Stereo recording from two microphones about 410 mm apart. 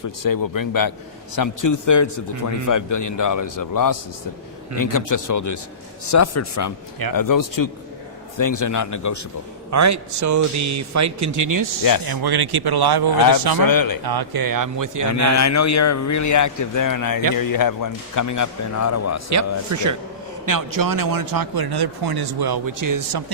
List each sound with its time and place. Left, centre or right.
0.2 s a man's voice: left
9.6 s a man's voice: right
11.8 s a man's voice: left
12.0 s speech: right
13.7 s a man's voice: left
14.0 s a man's voice: right
15.3 s a man's voice: left
19.3 s a man's voice: right